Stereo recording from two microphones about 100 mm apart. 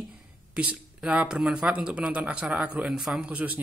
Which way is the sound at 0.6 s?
15° right (ahead or behind).